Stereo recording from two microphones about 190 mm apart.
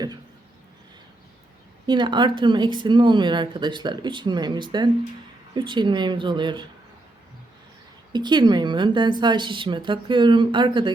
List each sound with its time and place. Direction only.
1.9 s speech: 25° right (ahead or behind)
8.1 s speech: 25° right (ahead or behind)